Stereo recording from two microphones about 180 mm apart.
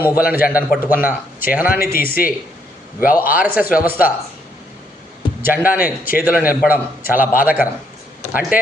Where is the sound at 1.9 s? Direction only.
55° left (ahead or behind).